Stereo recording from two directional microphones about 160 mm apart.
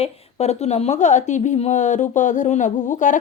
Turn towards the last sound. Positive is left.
turn(degrees=50)  # may be behind; listen again after turning